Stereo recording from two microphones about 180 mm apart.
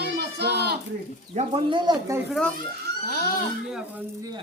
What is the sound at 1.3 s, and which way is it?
Speech, 30° right (ahead or behind).